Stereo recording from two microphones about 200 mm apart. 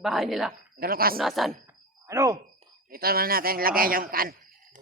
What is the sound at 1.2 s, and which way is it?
Speech, centre (ahead or behind).